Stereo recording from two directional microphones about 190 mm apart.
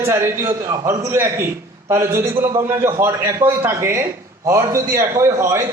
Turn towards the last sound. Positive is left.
turn(degrees=-15)  # may be behind; listen again after turning